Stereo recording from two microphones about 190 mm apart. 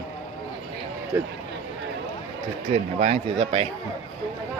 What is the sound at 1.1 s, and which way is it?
Speech, 15° right (ahead or behind).